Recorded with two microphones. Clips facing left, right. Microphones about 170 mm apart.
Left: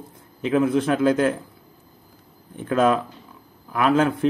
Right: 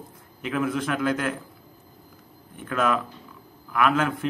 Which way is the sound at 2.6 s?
30° left (ahead or behind).